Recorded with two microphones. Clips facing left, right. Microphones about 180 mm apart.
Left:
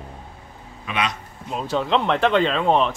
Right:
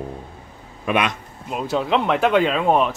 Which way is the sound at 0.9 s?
55° right (ahead or behind).